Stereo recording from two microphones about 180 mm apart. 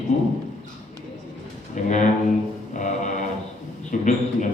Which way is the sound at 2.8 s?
40° left (ahead or behind).